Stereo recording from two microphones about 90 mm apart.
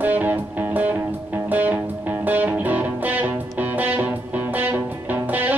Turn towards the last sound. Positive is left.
turn(degrees=-20)  # may be behind; listen again after turning